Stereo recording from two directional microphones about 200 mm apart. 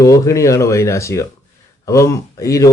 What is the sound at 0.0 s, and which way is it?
Speech, 15° left (ahead or behind).